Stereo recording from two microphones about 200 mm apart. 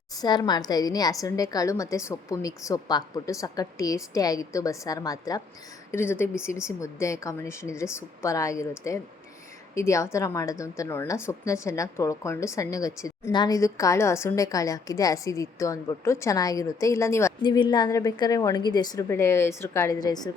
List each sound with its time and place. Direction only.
0.2 s a woman's voice: 20° left (ahead or behind)